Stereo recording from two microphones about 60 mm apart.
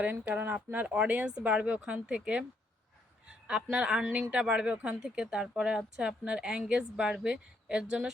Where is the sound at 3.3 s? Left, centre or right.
Centre.